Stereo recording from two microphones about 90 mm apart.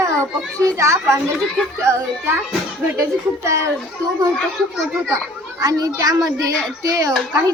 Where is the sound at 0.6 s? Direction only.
35° right (ahead or behind).